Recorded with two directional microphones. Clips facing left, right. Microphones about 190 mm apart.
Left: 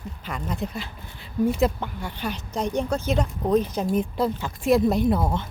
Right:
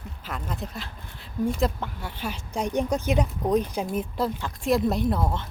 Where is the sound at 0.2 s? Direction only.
Centre (ahead or behind).